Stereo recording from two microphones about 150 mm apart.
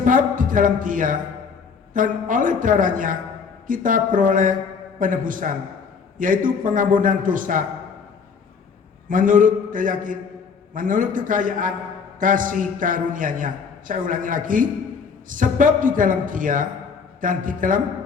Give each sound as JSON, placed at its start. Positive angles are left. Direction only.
{"t": 0.0, "sound": "a man's voice", "side_deg": -65}
{"t": 9.0, "sound": "a man's voice", "side_deg": -65}